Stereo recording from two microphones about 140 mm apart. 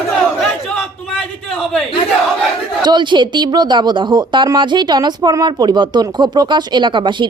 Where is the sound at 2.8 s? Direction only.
35° right (ahead or behind).